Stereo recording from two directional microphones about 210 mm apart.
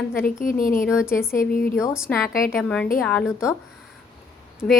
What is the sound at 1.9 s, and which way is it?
A woman's voice, 5° right (ahead or behind).